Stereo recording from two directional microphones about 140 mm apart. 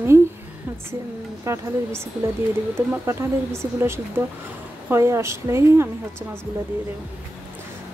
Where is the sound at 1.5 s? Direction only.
20° right (ahead or behind).